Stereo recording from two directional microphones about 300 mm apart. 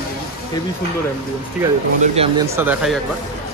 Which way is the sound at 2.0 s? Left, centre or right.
Centre.